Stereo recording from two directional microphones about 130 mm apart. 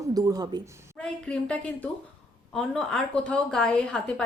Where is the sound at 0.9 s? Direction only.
5° left (ahead or behind).